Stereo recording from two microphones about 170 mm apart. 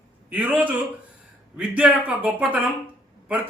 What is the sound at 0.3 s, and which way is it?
A man's voice, 10° right (ahead or behind).